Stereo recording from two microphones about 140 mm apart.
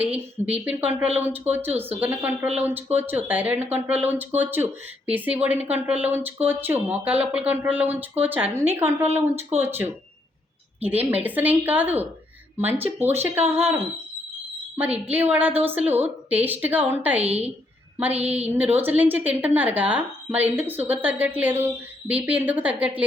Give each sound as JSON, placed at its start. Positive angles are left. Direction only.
{"t": 0.5, "sound": "speech", "side_deg": -10}
{"t": 15.1, "sound": "speech", "side_deg": -10}